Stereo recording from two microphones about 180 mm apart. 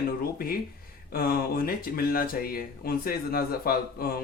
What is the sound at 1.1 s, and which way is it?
A man's voice, 55° left (ahead or behind).